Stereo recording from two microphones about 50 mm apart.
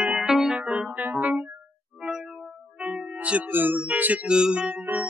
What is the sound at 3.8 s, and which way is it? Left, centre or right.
Speech, right.